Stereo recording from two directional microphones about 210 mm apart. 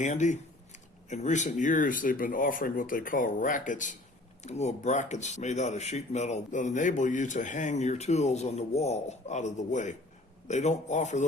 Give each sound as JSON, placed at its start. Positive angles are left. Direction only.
{"t": 0.0, "sound": "speech", "side_deg": 35}